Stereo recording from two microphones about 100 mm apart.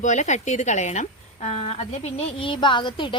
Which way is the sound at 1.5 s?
90° left.